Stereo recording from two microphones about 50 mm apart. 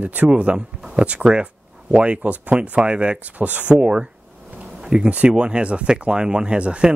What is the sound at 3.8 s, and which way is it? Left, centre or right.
Speech, centre.